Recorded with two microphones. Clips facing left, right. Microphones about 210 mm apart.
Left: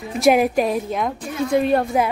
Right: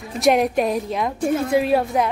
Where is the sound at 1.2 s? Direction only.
50° right (ahead or behind).